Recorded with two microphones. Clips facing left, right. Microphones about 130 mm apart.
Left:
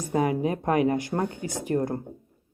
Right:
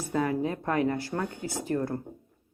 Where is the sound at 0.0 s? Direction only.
15° left (ahead or behind).